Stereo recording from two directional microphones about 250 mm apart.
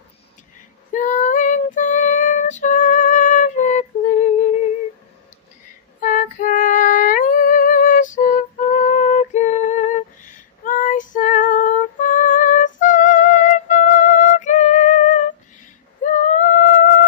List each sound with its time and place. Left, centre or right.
0.9 s female singing: left
5.9 s music: left
16.0 s a sound: left